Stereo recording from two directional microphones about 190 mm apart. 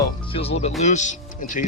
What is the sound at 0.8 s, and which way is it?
Speech, 40° left (ahead or behind).